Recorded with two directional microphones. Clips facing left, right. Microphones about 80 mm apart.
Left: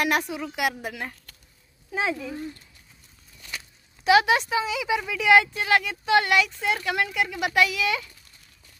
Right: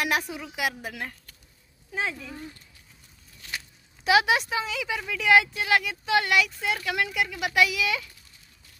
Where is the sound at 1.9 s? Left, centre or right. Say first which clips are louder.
Left 4 dB; centre.